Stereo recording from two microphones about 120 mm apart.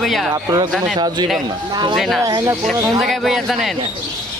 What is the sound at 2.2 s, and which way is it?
Speech, 30° right (ahead or behind).